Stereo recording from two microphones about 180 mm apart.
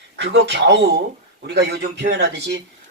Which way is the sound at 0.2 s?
75° right (ahead or behind).